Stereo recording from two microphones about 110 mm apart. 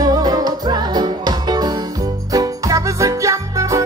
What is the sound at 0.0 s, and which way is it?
Music, 35° right (ahead or behind).